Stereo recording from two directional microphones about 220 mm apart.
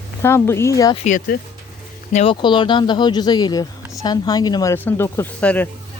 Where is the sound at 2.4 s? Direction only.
20° left (ahead or behind).